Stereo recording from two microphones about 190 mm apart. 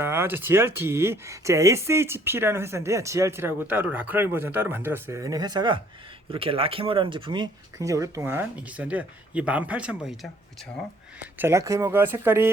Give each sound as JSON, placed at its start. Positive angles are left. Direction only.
{"t": 0.0, "sound": "speech", "side_deg": -10}
{"t": 11.3, "sound": "speech", "side_deg": -15}